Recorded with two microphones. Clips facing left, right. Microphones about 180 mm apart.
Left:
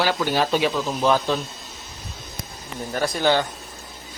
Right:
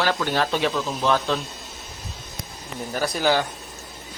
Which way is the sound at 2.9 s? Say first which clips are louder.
Left 1 dB; 5° right (ahead or behind).